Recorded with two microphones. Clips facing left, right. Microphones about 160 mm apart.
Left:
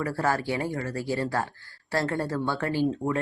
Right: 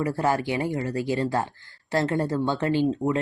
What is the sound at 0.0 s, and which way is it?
Speech, 20° right (ahead or behind).